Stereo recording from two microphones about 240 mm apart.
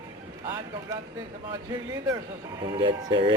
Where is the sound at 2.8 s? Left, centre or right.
Centre.